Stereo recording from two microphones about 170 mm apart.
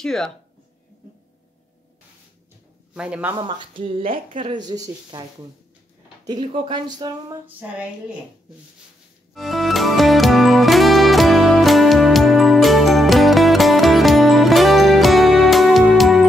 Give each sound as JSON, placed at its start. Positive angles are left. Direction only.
{"t": 0.0, "sound": "speech", "side_deg": 5}
{"t": 2.9, "sound": "a man's voice", "side_deg": -5}
{"t": 3.3, "sound": "speech", "side_deg": -30}
{"t": 6.2, "sound": "speech", "side_deg": -30}
{"t": 9.3, "sound": "music", "side_deg": 0}